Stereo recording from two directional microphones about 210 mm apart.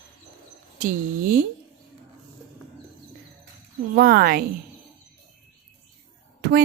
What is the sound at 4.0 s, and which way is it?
Speech, 45° right (ahead or behind).